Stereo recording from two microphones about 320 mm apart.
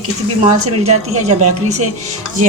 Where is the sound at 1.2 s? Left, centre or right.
Right.